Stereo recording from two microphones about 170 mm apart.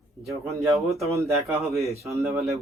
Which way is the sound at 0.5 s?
Centre (ahead or behind).